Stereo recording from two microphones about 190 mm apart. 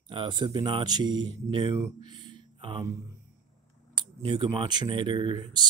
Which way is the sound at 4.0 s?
25° right (ahead or behind).